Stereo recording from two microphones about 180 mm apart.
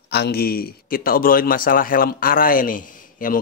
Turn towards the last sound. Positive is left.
turn(degrees=50)  # may be behind; listen again after turning